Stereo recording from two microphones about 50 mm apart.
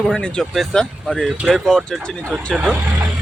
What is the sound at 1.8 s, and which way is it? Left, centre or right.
Speech, centre.